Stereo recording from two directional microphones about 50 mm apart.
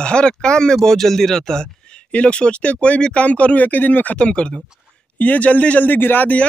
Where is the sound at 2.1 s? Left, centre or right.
Left.